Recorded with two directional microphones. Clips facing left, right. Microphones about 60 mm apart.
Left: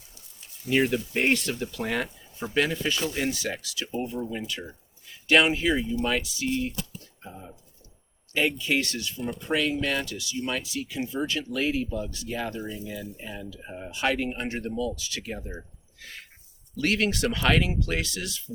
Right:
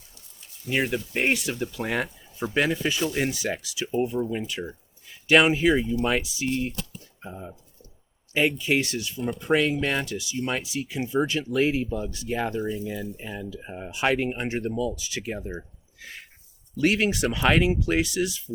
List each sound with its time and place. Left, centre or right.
0.7 s speech: centre
16.7 s speech: centre